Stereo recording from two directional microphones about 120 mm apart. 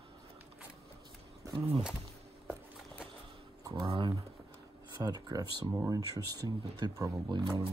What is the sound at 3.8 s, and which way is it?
Speech, 45° right (ahead or behind).